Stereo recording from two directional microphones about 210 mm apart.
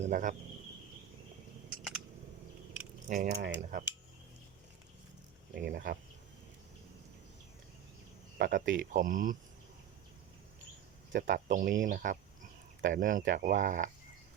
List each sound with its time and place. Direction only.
0.0 s speech: 40° right (ahead or behind)
3.1 s speech: 40° right (ahead or behind)
5.5 s speech: 45° right (ahead or behind)
8.4 s speech: 40° right (ahead or behind)
11.1 s speech: 45° right (ahead or behind)